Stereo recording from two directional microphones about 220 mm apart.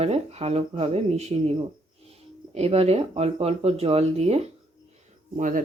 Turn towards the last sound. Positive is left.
turn(degrees=-35)  # may be behind; listen again after turning